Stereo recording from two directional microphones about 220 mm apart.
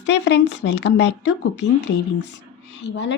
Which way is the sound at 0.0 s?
50° left (ahead or behind).